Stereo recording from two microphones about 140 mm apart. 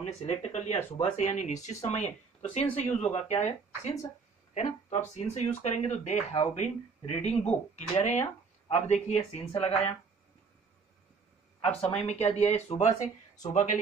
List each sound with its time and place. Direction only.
0.0 s speech: 55° left (ahead or behind)
9.6 s speech: 45° left (ahead or behind)
11.6 s speech: 45° left (ahead or behind)